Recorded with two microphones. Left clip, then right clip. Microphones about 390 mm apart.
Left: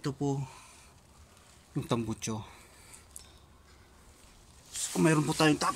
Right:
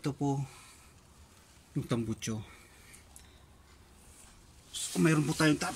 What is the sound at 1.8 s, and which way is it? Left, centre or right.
Speech, centre.